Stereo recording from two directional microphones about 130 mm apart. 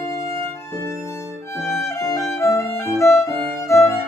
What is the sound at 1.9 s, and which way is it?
Violin, 25° left (ahead or behind).